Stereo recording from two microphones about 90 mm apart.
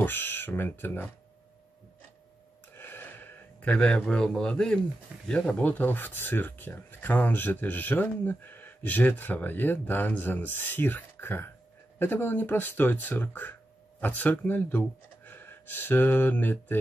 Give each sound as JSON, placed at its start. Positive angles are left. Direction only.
{"t": 0.0, "sound": "speech", "side_deg": 25}
{"t": 2.7, "sound": "a sound", "side_deg": 25}
{"t": 3.7, "sound": "a man's voice", "side_deg": 10}